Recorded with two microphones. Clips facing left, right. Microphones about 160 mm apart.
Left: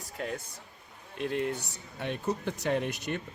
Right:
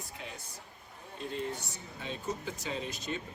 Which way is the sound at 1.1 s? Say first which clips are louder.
Left 6 dB; 70° left (ahead or behind).